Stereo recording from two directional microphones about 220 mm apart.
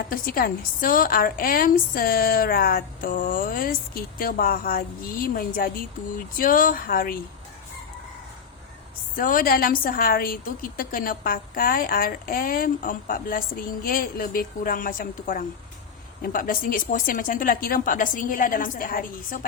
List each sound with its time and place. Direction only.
0.1 s a woman's voice: 40° left (ahead or behind)
9.1 s a woman's voice: 40° left (ahead or behind)